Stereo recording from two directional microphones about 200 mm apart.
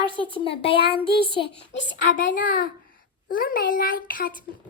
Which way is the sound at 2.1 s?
40° left (ahead or behind).